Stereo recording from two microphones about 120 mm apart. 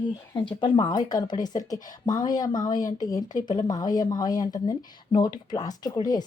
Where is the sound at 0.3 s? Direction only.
40° left (ahead or behind).